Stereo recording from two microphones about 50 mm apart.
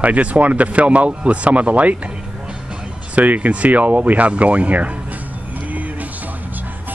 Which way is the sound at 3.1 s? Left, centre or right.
Right.